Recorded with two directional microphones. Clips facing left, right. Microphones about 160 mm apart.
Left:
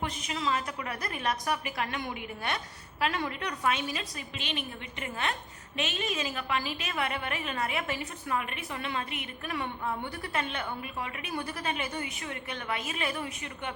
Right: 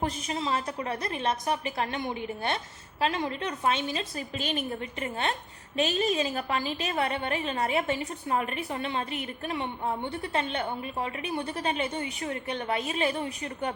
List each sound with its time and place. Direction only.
0.0 s a woman's voice: 30° right (ahead or behind)